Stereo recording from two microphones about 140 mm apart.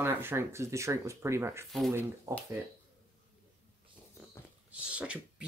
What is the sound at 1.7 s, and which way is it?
Speech, centre (ahead or behind).